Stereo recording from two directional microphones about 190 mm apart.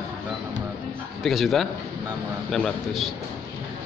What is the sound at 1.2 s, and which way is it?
A man's voice, centre (ahead or behind).